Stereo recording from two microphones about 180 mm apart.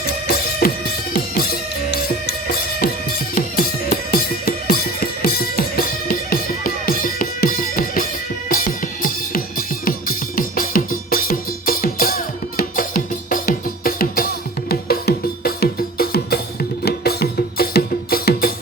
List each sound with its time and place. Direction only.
0.0 s music: 55° left (ahead or behind)